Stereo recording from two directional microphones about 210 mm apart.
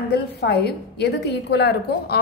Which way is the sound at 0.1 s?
55° left (ahead or behind).